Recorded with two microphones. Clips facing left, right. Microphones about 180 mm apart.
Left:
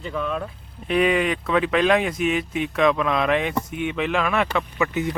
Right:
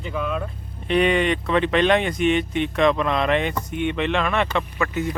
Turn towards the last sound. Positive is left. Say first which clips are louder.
# left 1 dB
turn(degrees=20)  # may be behind; listen again after turning